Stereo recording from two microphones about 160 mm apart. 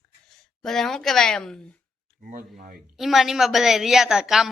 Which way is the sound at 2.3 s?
60° right (ahead or behind).